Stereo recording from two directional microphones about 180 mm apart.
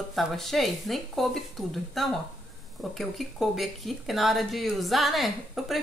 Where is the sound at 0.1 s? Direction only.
Centre (ahead or behind).